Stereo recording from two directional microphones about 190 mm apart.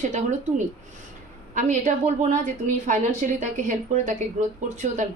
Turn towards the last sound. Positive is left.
turn(degrees=-40)  # may be behind; listen again after turning